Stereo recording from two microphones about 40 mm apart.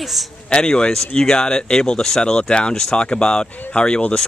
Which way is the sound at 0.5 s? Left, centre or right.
Left.